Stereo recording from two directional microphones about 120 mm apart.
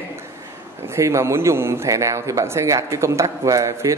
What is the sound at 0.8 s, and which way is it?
A man's voice, 25° right (ahead or behind).